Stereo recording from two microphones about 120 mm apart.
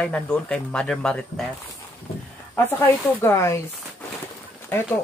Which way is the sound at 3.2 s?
25° left (ahead or behind).